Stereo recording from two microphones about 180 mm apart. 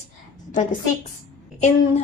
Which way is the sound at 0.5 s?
40° left (ahead or behind).